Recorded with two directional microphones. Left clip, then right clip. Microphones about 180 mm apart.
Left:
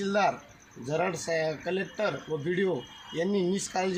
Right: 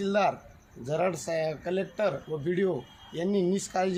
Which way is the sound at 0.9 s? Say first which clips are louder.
Right 1 dB; 30° right (ahead or behind).